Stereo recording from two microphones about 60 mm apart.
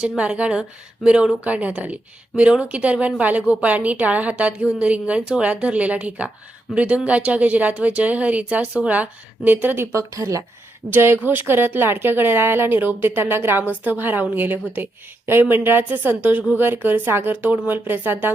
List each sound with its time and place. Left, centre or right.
0.0 s speech: centre; by 10.0 s right
10.0 s speech: right
10.9 s speech: right